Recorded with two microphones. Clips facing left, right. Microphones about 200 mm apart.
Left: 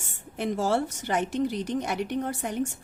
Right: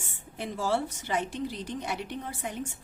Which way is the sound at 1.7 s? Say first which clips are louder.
Left 7 dB; 45° left (ahead or behind).